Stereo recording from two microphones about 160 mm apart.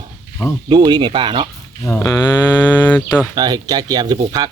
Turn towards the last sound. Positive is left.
turn(degrees=-25)  # may be behind; listen again after turning